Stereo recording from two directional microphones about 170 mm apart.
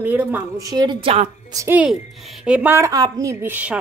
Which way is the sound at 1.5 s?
10° right (ahead or behind).